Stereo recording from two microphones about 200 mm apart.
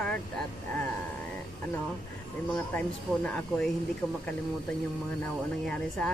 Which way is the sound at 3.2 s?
5° left (ahead or behind).